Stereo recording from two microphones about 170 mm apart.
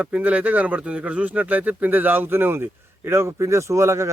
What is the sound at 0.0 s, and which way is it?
A man's voice, 10° right (ahead or behind).